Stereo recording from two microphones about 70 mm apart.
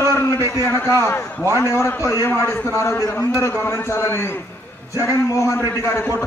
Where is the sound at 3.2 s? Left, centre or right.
Left.